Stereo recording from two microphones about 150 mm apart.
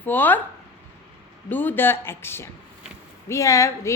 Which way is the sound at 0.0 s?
10° left (ahead or behind).